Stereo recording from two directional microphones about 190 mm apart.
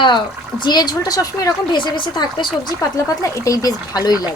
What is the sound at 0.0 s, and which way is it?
Speech, 25° left (ahead or behind).